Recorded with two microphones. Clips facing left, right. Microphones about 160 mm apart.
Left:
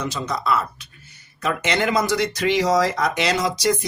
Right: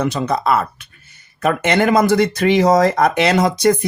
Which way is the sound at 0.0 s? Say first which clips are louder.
Right 7 dB; 55° right (ahead or behind).